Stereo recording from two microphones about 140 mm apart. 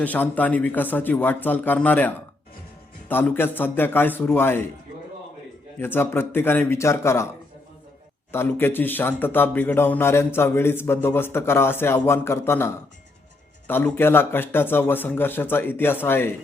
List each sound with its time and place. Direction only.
0.0 s a man's voice: 10° left (ahead or behind)
5.8 s a man's voice: 15° left (ahead or behind)
8.3 s a man's voice: 15° left (ahead or behind)